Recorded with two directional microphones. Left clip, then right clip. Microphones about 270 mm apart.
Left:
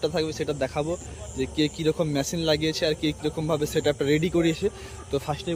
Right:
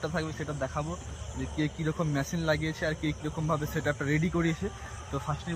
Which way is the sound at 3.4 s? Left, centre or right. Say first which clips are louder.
Left 6 dB; centre.